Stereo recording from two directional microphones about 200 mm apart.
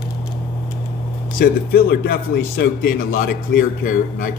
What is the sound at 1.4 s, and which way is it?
Speech, 50° left (ahead or behind).